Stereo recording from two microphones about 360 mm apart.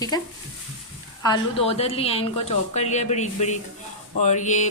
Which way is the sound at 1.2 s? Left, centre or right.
Centre.